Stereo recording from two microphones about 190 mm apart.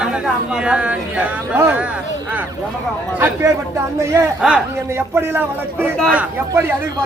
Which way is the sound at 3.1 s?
10° right (ahead or behind).